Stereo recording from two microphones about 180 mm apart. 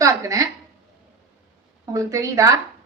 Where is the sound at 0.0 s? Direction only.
20° right (ahead or behind).